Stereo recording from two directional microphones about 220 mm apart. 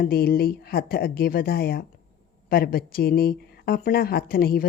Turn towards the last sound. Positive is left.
turn(degrees=45)  # may be behind; listen again after turning